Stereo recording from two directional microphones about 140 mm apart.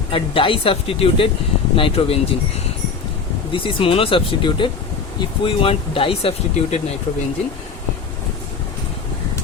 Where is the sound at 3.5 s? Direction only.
40° left (ahead or behind).